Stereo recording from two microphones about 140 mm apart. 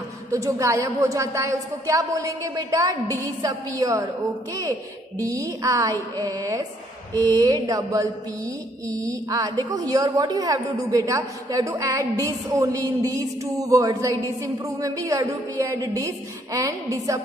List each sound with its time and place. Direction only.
0.3 s a woman's voice: 25° right (ahead or behind)
5.2 s a woman's voice: 25° right (ahead or behind)